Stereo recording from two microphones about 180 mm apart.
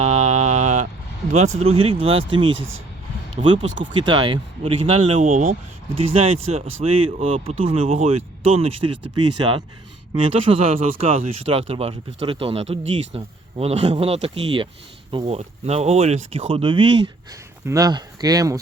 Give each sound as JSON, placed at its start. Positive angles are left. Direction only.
{"t": 0.0, "sound": "mantra", "side_deg": -40}
{"t": 1.3, "sound": "speech", "side_deg": -40}
{"t": 2.5, "sound": "speech", "side_deg": -90}
{"t": 3.4, "sound": "speech", "side_deg": -25}
{"t": 5.9, "sound": "speech", "side_deg": -35}